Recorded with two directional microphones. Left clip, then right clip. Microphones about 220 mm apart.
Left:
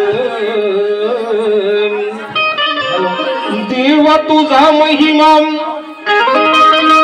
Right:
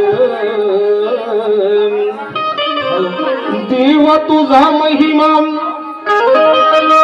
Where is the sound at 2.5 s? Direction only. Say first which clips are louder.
Left 1 dB; 50° right (ahead or behind).